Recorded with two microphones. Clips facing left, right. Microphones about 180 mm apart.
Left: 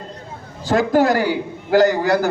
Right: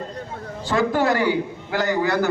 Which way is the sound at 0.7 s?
40° left (ahead or behind).